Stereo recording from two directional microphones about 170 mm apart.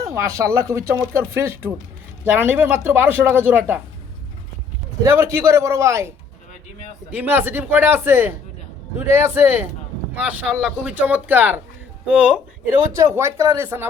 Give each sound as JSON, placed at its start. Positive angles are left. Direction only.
{"t": 0.0, "sound": "speech", "side_deg": -15}
{"t": 5.0, "sound": "speech", "side_deg": -15}
{"t": 7.1, "sound": "speech", "side_deg": -10}